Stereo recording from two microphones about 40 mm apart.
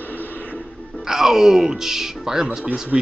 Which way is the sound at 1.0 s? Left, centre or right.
Centre.